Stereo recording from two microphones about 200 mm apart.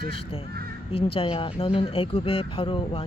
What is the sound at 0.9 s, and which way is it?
Speech, 25° left (ahead or behind).